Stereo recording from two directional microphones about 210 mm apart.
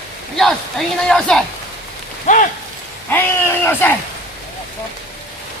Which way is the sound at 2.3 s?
35° left (ahead or behind).